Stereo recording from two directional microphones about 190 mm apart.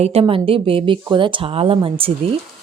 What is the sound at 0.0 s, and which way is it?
Speech, 30° right (ahead or behind).